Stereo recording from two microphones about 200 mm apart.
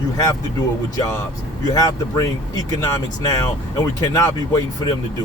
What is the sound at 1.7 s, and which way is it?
Speech, 15° left (ahead or behind).